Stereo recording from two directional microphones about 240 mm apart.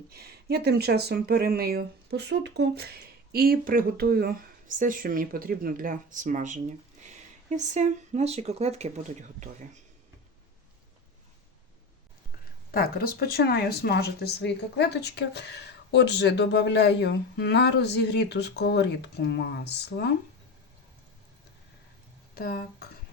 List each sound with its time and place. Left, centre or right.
0.1 s speech: right
12.7 s speech: left
22.4 s speech: left